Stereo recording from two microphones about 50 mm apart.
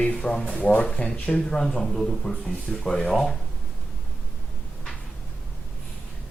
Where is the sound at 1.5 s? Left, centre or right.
Centre.